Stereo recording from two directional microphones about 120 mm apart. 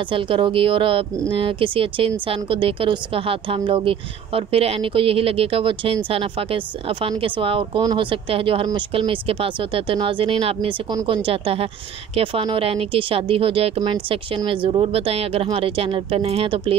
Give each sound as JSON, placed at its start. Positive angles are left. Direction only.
{"t": 0.1, "sound": "a woman's voice", "side_deg": -45}
{"t": 10.9, "sound": "speech", "side_deg": -35}
{"t": 11.2, "sound": "a woman's voice", "side_deg": -50}